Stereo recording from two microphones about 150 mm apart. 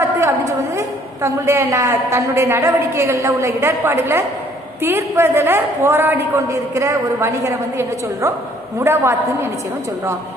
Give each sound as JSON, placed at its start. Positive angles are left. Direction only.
{"t": 0.2, "sound": "a woman's voice", "side_deg": -20}